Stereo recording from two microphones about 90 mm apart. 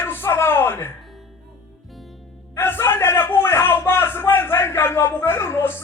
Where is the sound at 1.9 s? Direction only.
Centre (ahead or behind).